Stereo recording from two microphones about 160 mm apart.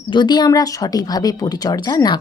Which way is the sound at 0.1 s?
30° left (ahead or behind).